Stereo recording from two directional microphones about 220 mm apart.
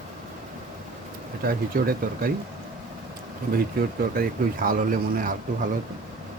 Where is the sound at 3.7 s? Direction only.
40° right (ahead or behind).